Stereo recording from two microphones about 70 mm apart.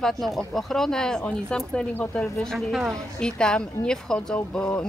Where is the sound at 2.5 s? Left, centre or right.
Centre.